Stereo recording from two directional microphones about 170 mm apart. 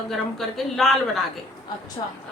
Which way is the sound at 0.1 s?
Centre (ahead or behind).